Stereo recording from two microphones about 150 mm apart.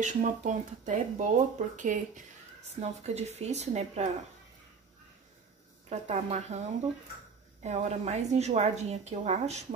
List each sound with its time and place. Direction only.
0.0 s speech: 55° right (ahead or behind)
2.8 s a woman's voice: 45° right (ahead or behind)
5.9 s a woman's voice: 50° right (ahead or behind)
7.6 s a woman's voice: 50° right (ahead or behind)